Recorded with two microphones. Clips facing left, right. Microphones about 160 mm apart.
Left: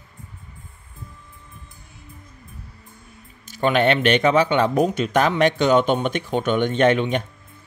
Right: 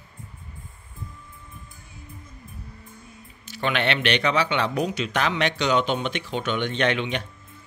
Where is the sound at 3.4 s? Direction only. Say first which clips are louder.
Left 7 dB; 45° left (ahead or behind).